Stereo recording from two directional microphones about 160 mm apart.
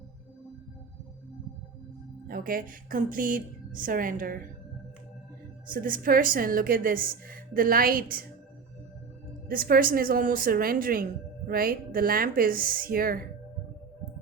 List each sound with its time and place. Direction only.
2.2 s a woman's voice: 65° right (ahead or behind)
5.6 s a woman's voice: 60° right (ahead or behind)
9.5 s a woman's voice: 65° right (ahead or behind)